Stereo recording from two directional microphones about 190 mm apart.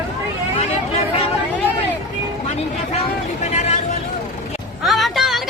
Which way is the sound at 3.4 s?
35° left (ahead or behind).